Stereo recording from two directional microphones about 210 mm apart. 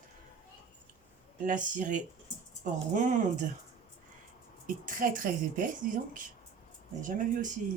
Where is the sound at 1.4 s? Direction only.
35° right (ahead or behind).